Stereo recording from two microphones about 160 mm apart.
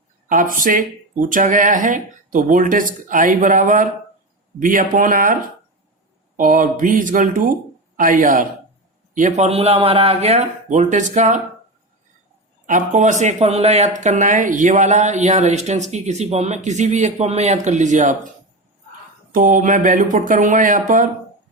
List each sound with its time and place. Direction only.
0.3 s speech: 55° right (ahead or behind)
12.6 s speech: 50° right (ahead or behind)
19.3 s speech: 55° right (ahead or behind)